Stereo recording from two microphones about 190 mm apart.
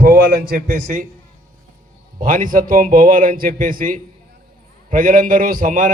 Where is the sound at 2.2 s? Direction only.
45° right (ahead or behind).